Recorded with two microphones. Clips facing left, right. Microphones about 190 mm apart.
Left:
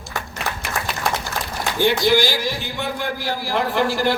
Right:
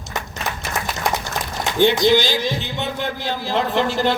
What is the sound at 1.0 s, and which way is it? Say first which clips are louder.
A man's voice: right 2 dB; 20° right (ahead or behind).